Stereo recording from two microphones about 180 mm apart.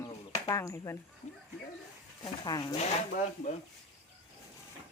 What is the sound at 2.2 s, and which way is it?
Speech, 20° left (ahead or behind).